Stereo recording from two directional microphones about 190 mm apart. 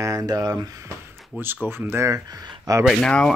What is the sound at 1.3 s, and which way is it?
Speech, 10° right (ahead or behind).